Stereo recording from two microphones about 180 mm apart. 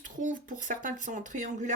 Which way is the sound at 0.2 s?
45° right (ahead or behind).